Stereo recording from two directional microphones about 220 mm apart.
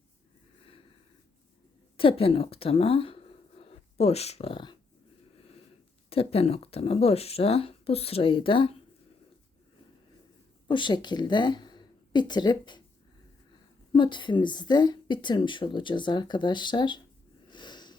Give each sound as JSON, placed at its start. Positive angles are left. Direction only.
{"t": 2.0, "sound": "speech", "side_deg": 25}
{"t": 6.1, "sound": "a woman's voice", "side_deg": 25}
{"t": 10.7, "sound": "a woman's voice", "side_deg": 20}
{"t": 13.9, "sound": "a woman's voice", "side_deg": 20}
{"t": 17.5, "sound": "a sound", "side_deg": 20}